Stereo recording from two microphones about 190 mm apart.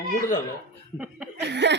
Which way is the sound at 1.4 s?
65° right (ahead or behind).